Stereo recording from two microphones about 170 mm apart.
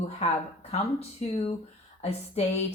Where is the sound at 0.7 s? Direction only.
40° left (ahead or behind).